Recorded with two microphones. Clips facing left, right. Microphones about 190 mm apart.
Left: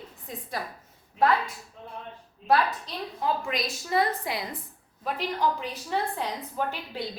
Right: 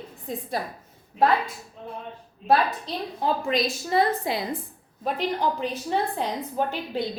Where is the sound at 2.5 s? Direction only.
30° right (ahead or behind).